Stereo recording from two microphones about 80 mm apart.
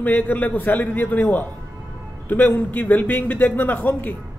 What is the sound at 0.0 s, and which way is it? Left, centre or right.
A man's voice, left.